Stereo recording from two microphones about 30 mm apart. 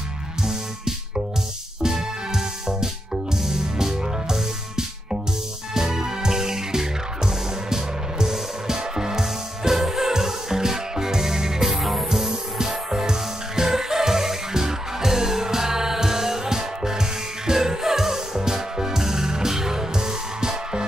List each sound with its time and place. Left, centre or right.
0.4 s music: centre
11.8 s music: centre
12.3 s music: centre